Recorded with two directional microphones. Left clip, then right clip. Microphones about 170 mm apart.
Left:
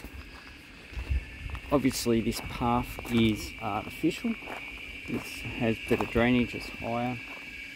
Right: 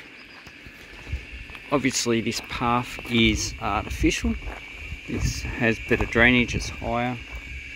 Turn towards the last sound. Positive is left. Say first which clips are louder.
# right 5 dB
turn(degrees=-25)  # may be behind; listen again after turning